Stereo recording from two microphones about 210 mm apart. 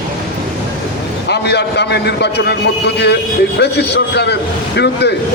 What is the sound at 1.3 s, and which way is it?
A man's voice, 55° left (ahead or behind).